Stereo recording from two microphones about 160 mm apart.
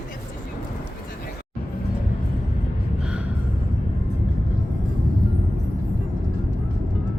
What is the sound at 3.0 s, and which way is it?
Gasp, 5° right (ahead or behind).